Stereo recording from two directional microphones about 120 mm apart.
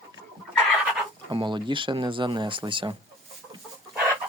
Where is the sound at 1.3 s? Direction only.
40° right (ahead or behind).